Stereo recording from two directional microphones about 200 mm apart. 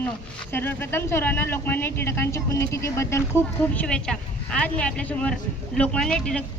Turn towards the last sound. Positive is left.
turn(degrees=5)  # may be behind; listen again after turning